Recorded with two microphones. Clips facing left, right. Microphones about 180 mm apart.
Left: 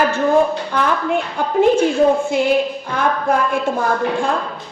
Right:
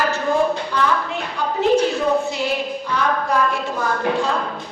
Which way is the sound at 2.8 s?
50° left (ahead or behind).